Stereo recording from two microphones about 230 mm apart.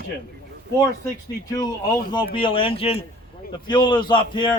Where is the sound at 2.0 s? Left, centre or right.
Left.